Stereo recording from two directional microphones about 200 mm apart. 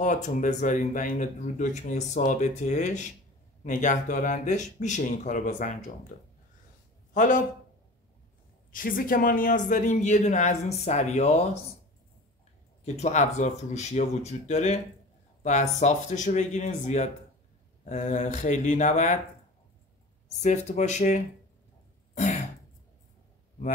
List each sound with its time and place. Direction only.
0.0 s speech: 40° left (ahead or behind)
7.2 s speech: 40° left (ahead or behind)
8.7 s speech: 45° left (ahead or behind)
12.8 s speech: 35° left (ahead or behind)
20.4 s speech: 35° left (ahead or behind)
22.1 s throat clearing: 35° left (ahead or behind)